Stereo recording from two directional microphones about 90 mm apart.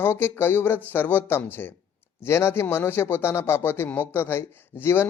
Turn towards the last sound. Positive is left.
turn(degrees=25)  # may be behind; listen again after turning